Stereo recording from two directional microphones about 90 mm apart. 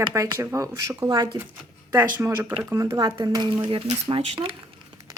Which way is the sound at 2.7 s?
40° right (ahead or behind).